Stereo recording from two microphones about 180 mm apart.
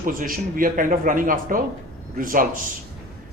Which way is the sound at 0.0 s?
50° right (ahead or behind).